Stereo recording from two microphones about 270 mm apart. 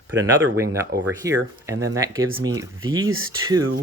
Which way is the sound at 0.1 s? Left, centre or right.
Right.